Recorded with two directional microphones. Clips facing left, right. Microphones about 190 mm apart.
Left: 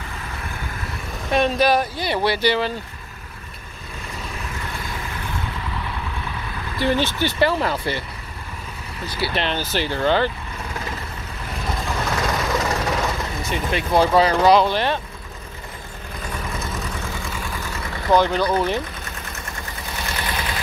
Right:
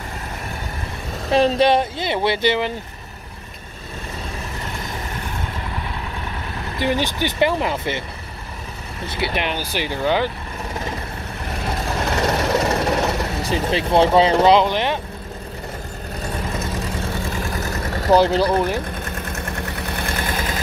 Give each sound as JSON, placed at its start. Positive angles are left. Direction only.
{"t": 1.3, "sound": "speech", "side_deg": -30}
{"t": 6.8, "sound": "speech", "side_deg": -15}
{"t": 9.0, "sound": "speech", "side_deg": -25}
{"t": 9.3, "sound": "speech", "side_deg": -10}
{"t": 12.2, "sound": "vehicle", "side_deg": -30}
{"t": 13.4, "sound": "speech", "side_deg": -35}
{"t": 16.5, "sound": "vehicle", "side_deg": -30}
{"t": 19.0, "sound": "vehicle", "side_deg": -55}